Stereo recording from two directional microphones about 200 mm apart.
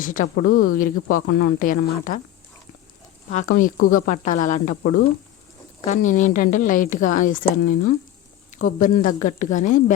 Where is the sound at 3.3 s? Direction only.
40° left (ahead or behind).